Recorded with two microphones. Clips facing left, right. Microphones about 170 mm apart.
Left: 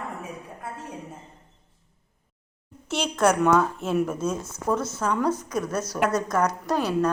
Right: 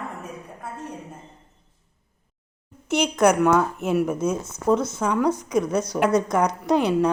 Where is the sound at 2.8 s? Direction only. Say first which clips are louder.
Right 4 dB; 15° right (ahead or behind).